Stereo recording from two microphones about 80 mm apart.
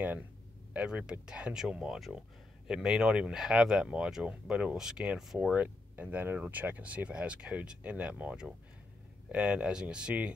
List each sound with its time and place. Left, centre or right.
0.7 s speech: centre